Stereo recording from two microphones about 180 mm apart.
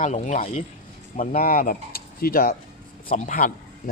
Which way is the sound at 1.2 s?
55° left (ahead or behind).